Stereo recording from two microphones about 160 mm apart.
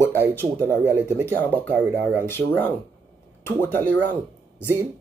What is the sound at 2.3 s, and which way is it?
Mantra, 15° left (ahead or behind).